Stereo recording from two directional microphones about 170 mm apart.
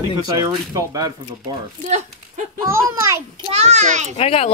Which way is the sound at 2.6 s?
15° right (ahead or behind).